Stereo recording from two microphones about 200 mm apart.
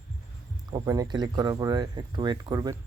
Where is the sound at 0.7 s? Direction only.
15° right (ahead or behind).